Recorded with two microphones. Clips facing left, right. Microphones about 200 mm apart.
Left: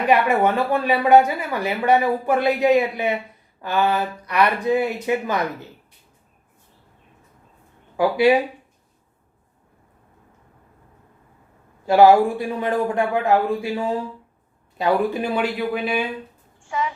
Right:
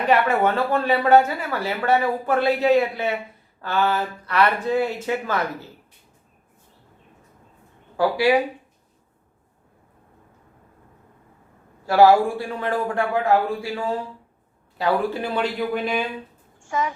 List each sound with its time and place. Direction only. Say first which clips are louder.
0.1 s speech: left 1 dB; 15° left (ahead or behind)
7.9 s a man's voice: left 2 dB; 20° left (ahead or behind)
11.9 s a man's voice: left 2 dB; 20° left (ahead or behind)
16.6 s a child's voice: right 1 dB; 45° right (ahead or behind)